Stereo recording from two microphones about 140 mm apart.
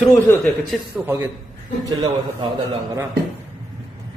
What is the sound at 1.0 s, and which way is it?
Speech, centre (ahead or behind).